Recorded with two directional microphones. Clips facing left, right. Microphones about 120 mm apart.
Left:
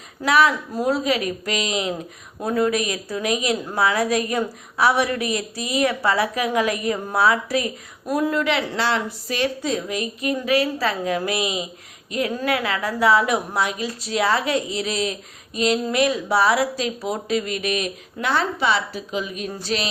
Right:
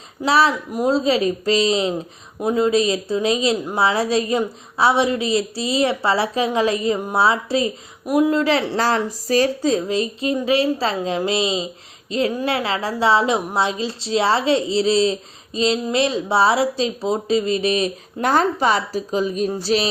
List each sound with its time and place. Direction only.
0.3 s a woman's voice: 30° right (ahead or behind)
2.4 s a woman's voice: 20° right (ahead or behind)
8.0 s a woman's voice: 15° right (ahead or behind)
8.4 s a woman's voice: 30° right (ahead or behind)
18.3 s a woman's voice: 45° right (ahead or behind)